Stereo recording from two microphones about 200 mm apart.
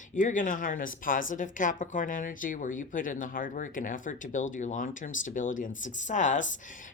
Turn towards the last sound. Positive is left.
turn(degrees=40)  # may be behind; listen again after turning